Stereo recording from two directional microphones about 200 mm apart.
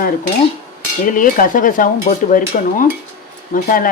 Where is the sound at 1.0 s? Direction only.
45° left (ahead or behind).